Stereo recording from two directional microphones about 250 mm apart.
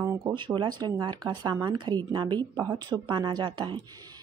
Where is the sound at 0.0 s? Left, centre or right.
Centre.